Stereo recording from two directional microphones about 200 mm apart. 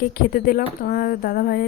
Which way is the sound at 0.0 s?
45° left (ahead or behind).